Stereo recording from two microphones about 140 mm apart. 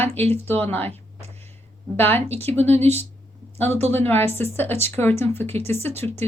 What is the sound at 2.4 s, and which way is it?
Speech, 50° right (ahead or behind).